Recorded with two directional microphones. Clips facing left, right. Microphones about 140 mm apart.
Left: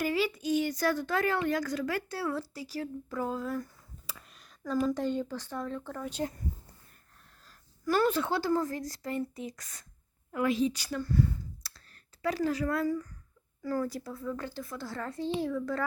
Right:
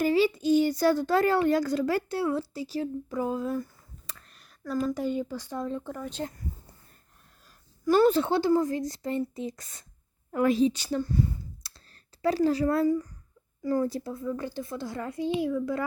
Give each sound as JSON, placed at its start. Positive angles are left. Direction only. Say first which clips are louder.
{"t": 0.0, "sound": "a child's voice", "louder": "right 6 dB", "side_deg": -30}
{"t": 4.0, "sound": "a sound", "louder": "left 2 dB", "side_deg": 5}
{"t": 4.9, "sound": "speech", "louder": "right 1 dB", "side_deg": -10}
{"t": 7.9, "sound": "a child's voice", "louder": "right 6 dB", "side_deg": -30}
{"t": 10.3, "sound": "a child's voice", "louder": "right 5 dB", "side_deg": -40}
{"t": 11.6, "sound": "clicking", "louder": "left 1 dB", "side_deg": -20}
{"t": 12.2, "sound": "a child's voice", "louder": "right 6 dB", "side_deg": -30}